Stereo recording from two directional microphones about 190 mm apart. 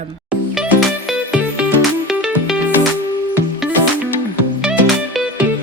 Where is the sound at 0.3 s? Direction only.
5° right (ahead or behind).